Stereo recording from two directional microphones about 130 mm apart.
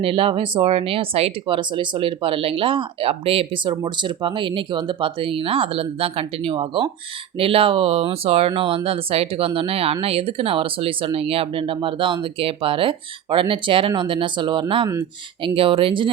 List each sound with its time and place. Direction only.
0.0 s speech: 45° right (ahead or behind)